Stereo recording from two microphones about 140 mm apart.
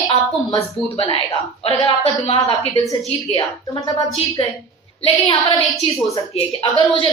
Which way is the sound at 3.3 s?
35° left (ahead or behind).